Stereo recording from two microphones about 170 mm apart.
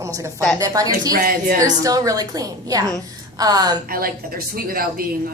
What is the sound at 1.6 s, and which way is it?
A woman's voice, 20° right (ahead or behind).